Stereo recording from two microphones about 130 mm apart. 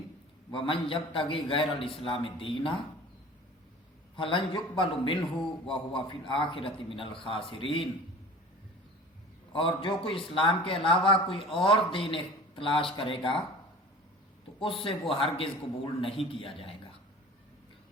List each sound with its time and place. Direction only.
0.5 s a man's voice: 45° left (ahead or behind)
4.1 s a man's voice: 40° left (ahead or behind)
9.5 s a man's voice: 40° left (ahead or behind)
14.6 s a man's voice: 45° left (ahead or behind)